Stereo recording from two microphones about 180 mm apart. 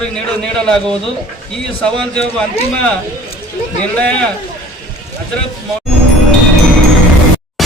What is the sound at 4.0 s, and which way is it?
Speech, 5° left (ahead or behind).